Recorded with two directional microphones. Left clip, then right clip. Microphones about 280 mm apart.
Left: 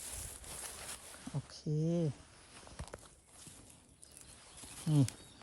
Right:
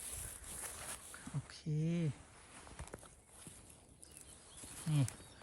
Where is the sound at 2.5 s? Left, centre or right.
Centre.